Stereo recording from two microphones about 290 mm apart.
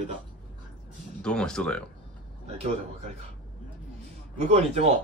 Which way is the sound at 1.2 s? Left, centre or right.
Centre.